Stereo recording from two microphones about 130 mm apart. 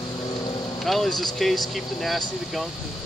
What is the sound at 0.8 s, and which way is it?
Speech, centre (ahead or behind).